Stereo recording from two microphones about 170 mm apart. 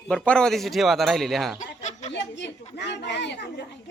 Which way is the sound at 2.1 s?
90° left.